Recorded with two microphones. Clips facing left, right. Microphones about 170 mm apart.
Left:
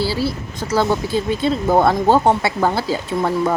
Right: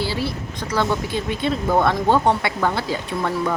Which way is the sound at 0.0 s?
35° left (ahead or behind).